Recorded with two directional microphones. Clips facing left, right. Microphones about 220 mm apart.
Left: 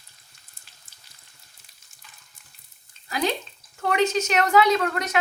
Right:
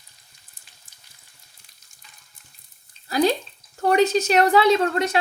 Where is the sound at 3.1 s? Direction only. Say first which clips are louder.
Right 6 dB; 35° right (ahead or behind).